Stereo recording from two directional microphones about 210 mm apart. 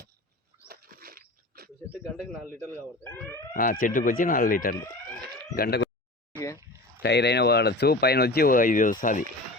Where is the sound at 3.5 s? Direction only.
40° left (ahead or behind).